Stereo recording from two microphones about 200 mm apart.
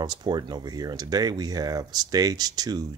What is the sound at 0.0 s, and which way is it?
Speech, 20° right (ahead or behind).